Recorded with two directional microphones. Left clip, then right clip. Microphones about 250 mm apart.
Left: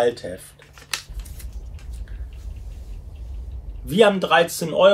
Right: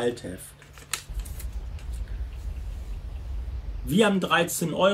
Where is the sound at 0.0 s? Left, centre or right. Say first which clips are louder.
Left 8 dB; centre.